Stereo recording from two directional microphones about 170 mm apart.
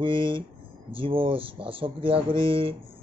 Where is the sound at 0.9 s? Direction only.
30° right (ahead or behind).